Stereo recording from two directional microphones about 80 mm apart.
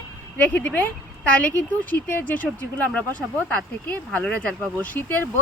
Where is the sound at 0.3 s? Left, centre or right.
Centre.